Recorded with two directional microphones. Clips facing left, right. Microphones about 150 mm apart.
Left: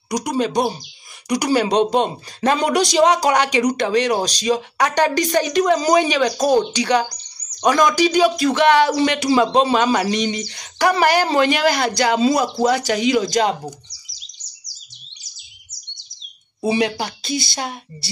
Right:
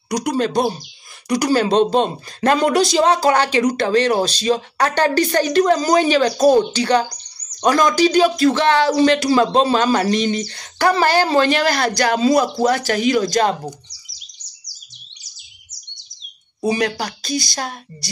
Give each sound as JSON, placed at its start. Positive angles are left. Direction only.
{"t": 0.1, "sound": "speech", "side_deg": 10}
{"t": 16.6, "sound": "speech", "side_deg": 20}